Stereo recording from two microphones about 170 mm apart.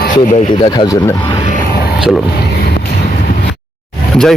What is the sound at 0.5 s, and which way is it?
Speech, 25° left (ahead or behind).